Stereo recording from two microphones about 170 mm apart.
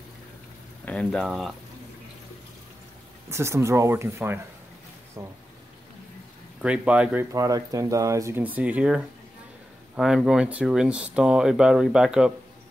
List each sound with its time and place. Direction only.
0.8 s speech: 5° left (ahead or behind)
3.3 s speech: 15° right (ahead or behind)
6.6 s speech: 5° right (ahead or behind)
7.3 s speech: 20° right (ahead or behind); by 12.3 s 5° right (ahead or behind)